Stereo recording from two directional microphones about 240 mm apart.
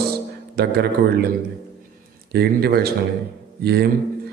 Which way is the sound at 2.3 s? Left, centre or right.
Right.